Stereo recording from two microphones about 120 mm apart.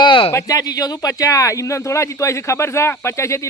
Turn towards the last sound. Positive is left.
turn(degrees=25)  # may be behind; listen again after turning